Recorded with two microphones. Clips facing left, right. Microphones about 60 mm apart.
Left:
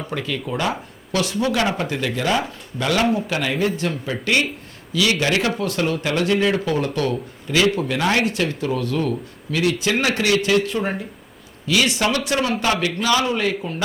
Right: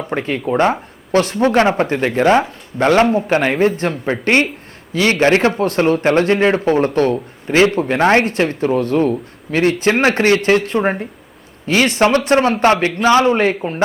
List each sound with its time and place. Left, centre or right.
0.1 s speech: right